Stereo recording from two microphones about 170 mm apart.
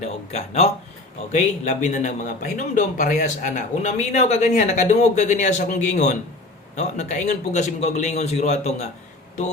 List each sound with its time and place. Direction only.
0.0 s a man's voice: 40° left (ahead or behind)